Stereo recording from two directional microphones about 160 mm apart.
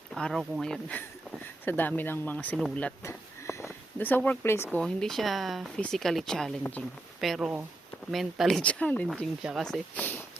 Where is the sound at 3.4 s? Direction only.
15° left (ahead or behind).